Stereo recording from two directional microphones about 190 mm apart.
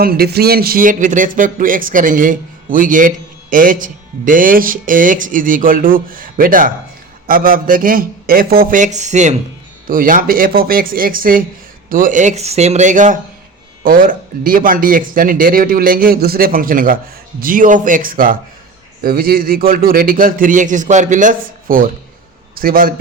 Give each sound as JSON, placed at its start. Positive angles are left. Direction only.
{"t": 0.0, "sound": "speech", "side_deg": -55}